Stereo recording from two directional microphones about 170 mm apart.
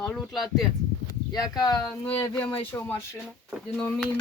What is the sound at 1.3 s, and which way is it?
Speech, 25° left (ahead or behind).